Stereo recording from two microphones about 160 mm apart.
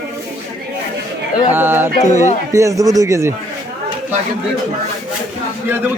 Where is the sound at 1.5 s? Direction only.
15° right (ahead or behind).